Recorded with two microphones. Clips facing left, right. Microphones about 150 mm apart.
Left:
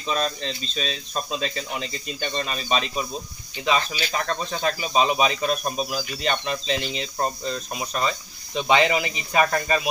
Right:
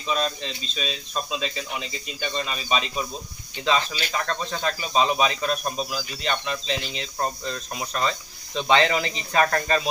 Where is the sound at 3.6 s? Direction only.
15° left (ahead or behind).